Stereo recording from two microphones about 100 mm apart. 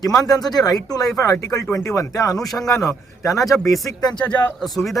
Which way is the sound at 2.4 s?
Centre (ahead or behind).